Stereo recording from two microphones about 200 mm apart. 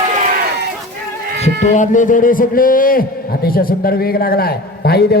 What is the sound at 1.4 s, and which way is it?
A man's voice, 35° left (ahead or behind).